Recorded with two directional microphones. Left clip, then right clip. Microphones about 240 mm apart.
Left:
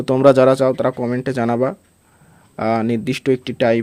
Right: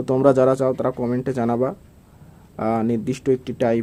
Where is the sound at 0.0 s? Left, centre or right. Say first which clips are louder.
Left 4 dB; left.